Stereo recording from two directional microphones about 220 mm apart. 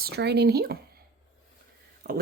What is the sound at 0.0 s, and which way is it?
Speech, 50° right (ahead or behind).